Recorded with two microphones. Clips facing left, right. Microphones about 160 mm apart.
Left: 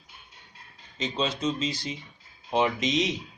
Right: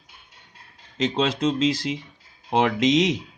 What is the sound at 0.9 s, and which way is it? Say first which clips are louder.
Speech: right 6 dB; 90° right.